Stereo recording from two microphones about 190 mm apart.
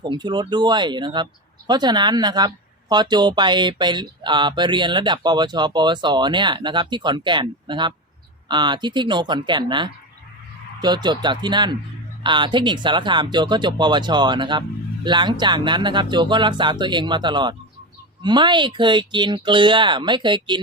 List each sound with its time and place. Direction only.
0.0 s speech: 25° right (ahead or behind)